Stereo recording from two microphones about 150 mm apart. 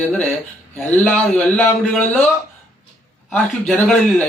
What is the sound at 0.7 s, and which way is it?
Speech, 10° left (ahead or behind).